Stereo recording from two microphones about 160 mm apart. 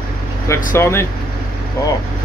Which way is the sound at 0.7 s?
15° left (ahead or behind).